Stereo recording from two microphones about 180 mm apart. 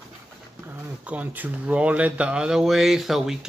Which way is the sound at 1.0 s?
10° right (ahead or behind).